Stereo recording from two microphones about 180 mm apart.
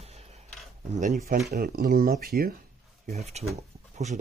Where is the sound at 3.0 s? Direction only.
35° right (ahead or behind).